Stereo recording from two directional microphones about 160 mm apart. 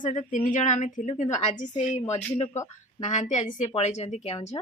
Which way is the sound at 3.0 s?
45° left (ahead or behind).